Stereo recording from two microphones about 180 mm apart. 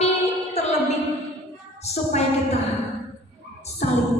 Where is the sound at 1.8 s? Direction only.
35° left (ahead or behind).